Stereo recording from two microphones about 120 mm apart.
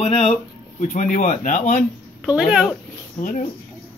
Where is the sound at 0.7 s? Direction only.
90° left.